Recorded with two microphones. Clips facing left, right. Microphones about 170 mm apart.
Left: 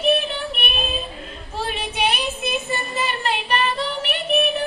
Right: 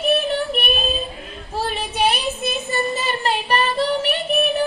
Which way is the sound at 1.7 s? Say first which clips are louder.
Right 3 dB; 35° right (ahead or behind).